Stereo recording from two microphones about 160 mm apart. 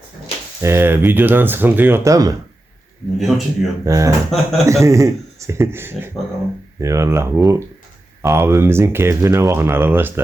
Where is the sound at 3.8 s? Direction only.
20° right (ahead or behind).